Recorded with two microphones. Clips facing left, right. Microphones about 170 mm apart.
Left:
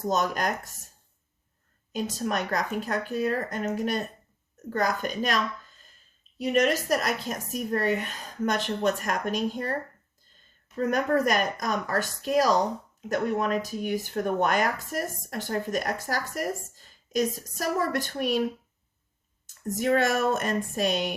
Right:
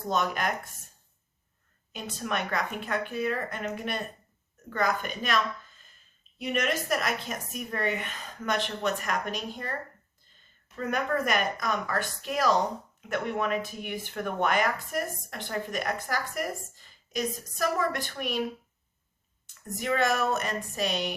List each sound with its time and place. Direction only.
0.1 s speech: 40° left (ahead or behind)
1.9 s speech: 40° left (ahead or behind)
6.4 s speech: 40° left (ahead or behind)
10.8 s speech: 40° left (ahead or behind)
19.6 s speech: 45° left (ahead or behind)